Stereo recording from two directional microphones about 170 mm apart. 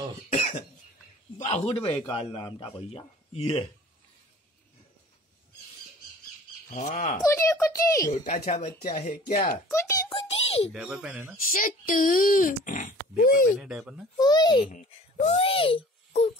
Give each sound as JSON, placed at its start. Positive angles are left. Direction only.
{"t": 0.3, "sound": "cough", "side_deg": 45}
{"t": 1.4, "sound": "speech", "side_deg": 35}
{"t": 6.7, "sound": "speech", "side_deg": 45}
{"t": 7.2, "sound": "a child's voice", "side_deg": 15}
{"t": 8.8, "sound": "speech", "side_deg": 50}
{"t": 9.7, "sound": "a child's voice", "side_deg": 15}
{"t": 10.1, "sound": "a sound", "side_deg": 35}
{"t": 10.7, "sound": "speech", "side_deg": -5}
{"t": 11.5, "sound": "speech", "side_deg": 55}
{"t": 13.6, "sound": "speech", "side_deg": 0}
{"t": 14.1, "sound": "a child's voice", "side_deg": 25}
{"t": 15.2, "sound": "a child's voice", "side_deg": 35}